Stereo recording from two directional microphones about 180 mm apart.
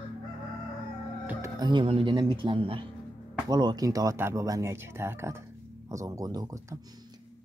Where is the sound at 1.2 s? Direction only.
10° right (ahead or behind).